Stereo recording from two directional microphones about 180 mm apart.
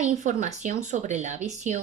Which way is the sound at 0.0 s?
40° right (ahead or behind).